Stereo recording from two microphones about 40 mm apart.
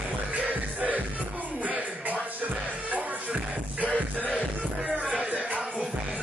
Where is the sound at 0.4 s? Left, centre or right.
Right.